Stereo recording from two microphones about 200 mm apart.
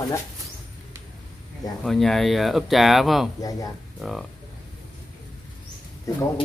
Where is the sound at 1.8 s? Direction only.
Centre (ahead or behind).